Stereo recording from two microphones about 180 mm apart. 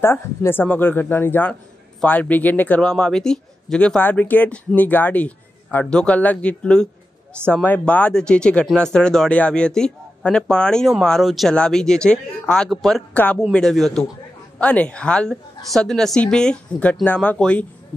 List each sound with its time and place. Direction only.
0.0 s a woman's voice: 15° left (ahead or behind)